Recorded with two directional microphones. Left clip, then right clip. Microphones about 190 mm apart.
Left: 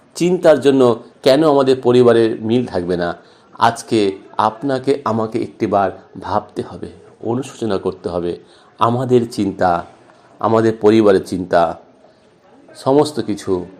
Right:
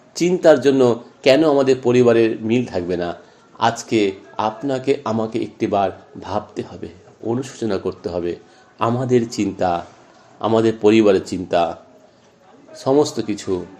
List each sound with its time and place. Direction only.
0.1 s speech: 15° left (ahead or behind)